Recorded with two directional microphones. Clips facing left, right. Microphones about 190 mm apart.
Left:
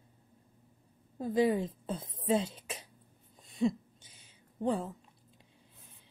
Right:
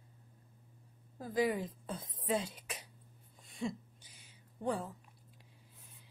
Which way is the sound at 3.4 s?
20° left (ahead or behind).